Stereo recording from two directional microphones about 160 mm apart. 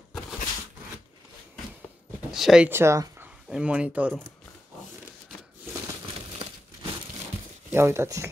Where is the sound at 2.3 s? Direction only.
5° right (ahead or behind).